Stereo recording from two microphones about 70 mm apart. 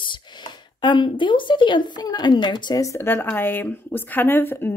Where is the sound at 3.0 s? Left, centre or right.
Left.